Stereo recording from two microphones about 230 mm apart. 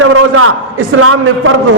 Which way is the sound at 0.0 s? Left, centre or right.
Right.